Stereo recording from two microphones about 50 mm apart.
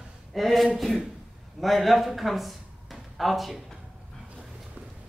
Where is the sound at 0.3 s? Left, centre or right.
Centre.